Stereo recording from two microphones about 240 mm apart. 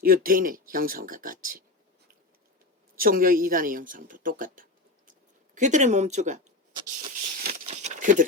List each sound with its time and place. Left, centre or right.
0.0 s speech: right
2.9 s speech: right
7.3 s a sound: right